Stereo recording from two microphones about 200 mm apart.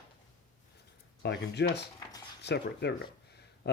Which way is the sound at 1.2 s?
55° left (ahead or behind).